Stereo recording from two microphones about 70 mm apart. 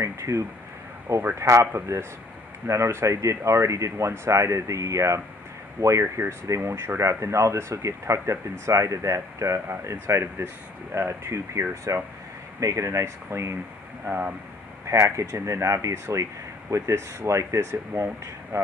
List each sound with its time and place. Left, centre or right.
0.0 s speech: right
14.0 s speech: right
14.9 s speech: right